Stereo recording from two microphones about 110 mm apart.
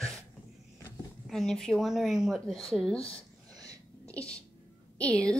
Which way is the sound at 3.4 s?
35° right (ahead or behind).